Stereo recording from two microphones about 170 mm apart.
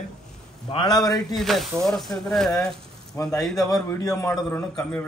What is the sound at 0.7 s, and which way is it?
Speech, 25° left (ahead or behind).